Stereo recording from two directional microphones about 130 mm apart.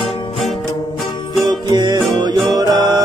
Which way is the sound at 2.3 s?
Centre (ahead or behind).